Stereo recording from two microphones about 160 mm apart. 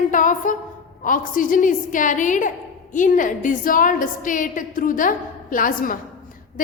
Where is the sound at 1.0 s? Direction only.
55° left (ahead or behind).